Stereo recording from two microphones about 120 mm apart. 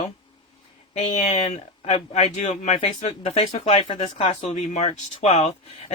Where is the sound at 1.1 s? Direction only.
70° left (ahead or behind).